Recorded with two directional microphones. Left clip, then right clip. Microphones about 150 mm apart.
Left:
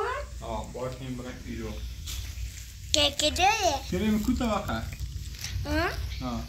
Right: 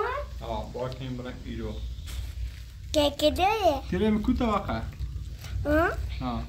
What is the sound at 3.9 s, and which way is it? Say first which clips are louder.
Speech: right 2 dB; centre (ahead or behind).